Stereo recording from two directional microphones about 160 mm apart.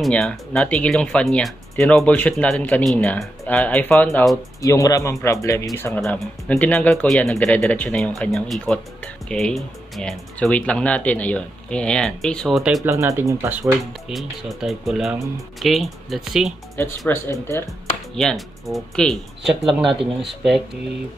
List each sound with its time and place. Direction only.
0.0 s speech: 5° left (ahead or behind)
4.6 s speech: 20° left (ahead or behind)
5.9 s speech: centre (ahead or behind)
12.8 s speech: 20° right (ahead or behind); by 16.5 s centre (ahead or behind)
16.8 s speech: 15° left (ahead or behind)
18.1 s speech: centre (ahead or behind)